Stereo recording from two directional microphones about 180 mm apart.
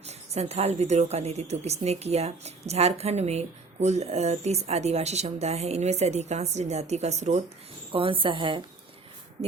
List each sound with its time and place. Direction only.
0.0 s a woman's voice: 35° right (ahead or behind)